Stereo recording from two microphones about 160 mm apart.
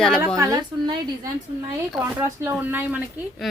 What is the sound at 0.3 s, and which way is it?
A woman's voice, 20° right (ahead or behind).